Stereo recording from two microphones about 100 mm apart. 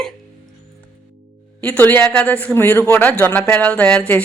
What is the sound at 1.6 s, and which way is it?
Speech, 15° left (ahead or behind).